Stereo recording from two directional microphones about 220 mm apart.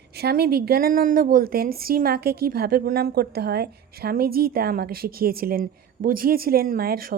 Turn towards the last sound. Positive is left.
turn(degrees=-40)  # may be behind; listen again after turning